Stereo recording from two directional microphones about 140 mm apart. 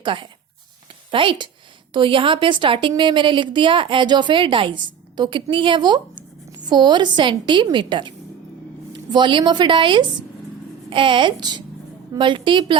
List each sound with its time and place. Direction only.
0.0 s a woman's voice: 35° right (ahead or behind)